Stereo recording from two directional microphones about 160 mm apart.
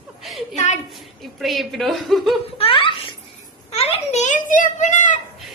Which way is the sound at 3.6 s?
40° left (ahead or behind).